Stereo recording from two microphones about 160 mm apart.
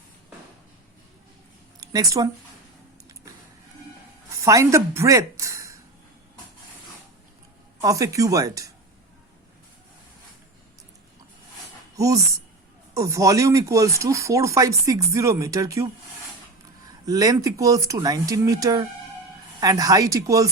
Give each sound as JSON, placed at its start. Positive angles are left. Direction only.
{"t": 1.8, "sound": "speech", "side_deg": -25}
{"t": 4.3, "sound": "speech", "side_deg": -20}
{"t": 7.8, "sound": "speech", "side_deg": -20}
{"t": 11.9, "sound": "speech", "side_deg": -20}
{"t": 17.1, "sound": "speech", "side_deg": -25}